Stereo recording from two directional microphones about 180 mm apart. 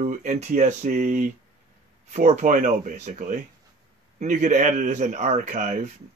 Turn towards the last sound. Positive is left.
turn(degrees=-40)  # may be behind; listen again after turning